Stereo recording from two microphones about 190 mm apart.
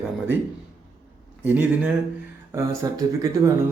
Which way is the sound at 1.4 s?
10° right (ahead or behind).